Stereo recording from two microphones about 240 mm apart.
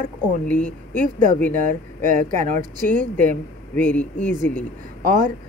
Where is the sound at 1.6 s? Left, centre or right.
Right.